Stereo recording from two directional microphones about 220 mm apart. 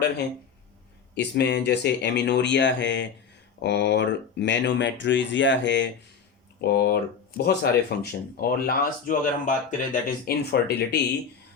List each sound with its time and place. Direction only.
1.1 s speech: 50° left (ahead or behind)